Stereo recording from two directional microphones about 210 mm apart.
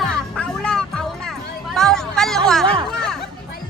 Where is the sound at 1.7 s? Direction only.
5° left (ahead or behind).